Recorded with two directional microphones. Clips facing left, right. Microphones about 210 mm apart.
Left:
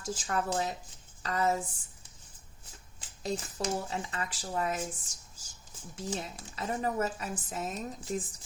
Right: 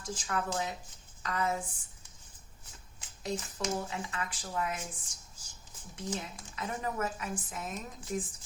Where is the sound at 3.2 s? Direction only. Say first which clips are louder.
Left 2 dB; 35° left (ahead or behind).